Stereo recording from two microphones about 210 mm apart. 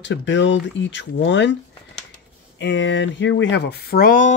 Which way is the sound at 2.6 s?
60° left (ahead or behind).